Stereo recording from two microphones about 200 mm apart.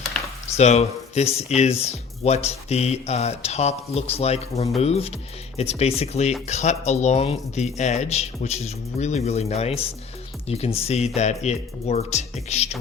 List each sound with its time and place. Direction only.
0.5 s speech: 30° left (ahead or behind)